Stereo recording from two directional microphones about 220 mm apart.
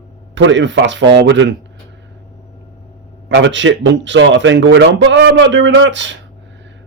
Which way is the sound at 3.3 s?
55° right (ahead or behind).